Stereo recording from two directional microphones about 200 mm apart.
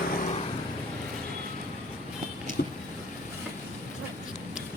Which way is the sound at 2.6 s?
50° left (ahead or behind).